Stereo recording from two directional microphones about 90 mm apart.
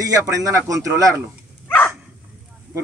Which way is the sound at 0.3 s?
35° right (ahead or behind).